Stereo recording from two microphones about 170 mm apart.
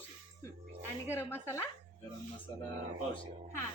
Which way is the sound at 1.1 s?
15° left (ahead or behind).